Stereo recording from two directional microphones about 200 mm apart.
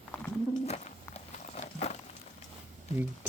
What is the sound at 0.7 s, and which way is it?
Walk, 35° left (ahead or behind).